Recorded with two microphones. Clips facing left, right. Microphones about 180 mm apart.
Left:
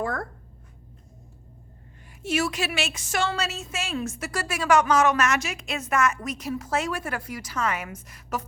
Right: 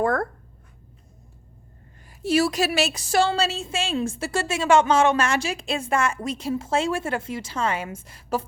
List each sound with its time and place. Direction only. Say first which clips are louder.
0.0 s speech: right 7 dB; 55° right (ahead or behind)
2.2 s a woman's voice: right 5 dB; 35° right (ahead or behind)